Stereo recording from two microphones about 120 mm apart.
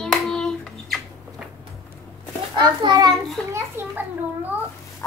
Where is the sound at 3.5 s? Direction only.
15° right (ahead or behind).